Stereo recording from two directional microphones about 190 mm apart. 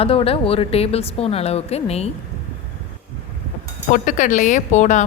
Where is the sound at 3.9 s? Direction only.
45° left (ahead or behind).